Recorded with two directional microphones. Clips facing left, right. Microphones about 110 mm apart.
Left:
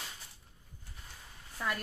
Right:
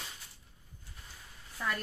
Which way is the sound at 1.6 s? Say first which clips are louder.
Even; 5° left (ahead or behind).